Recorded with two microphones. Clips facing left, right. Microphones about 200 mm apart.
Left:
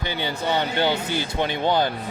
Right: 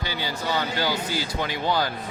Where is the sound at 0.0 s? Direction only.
20° left (ahead or behind).